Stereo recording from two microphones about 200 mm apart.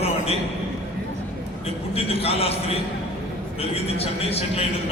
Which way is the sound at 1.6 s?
30° left (ahead or behind).